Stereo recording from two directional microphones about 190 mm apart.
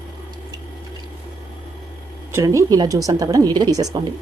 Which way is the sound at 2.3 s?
15° right (ahead or behind).